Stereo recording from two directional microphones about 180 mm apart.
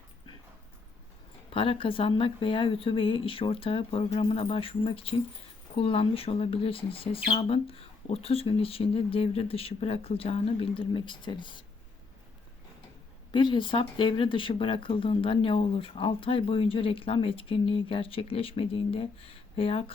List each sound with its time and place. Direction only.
1.5 s speech: 30° left (ahead or behind)
13.3 s speech: 25° left (ahead or behind)